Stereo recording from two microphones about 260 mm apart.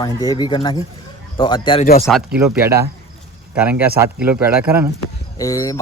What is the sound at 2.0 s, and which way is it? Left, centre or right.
Speech, centre.